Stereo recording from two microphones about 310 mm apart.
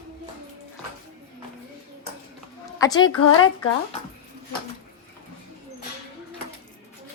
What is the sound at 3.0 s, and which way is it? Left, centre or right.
Speech, left.